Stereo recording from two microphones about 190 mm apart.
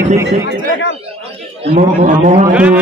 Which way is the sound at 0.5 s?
45° right (ahead or behind).